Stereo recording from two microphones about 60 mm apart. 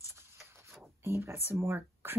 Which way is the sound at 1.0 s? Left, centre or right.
Right.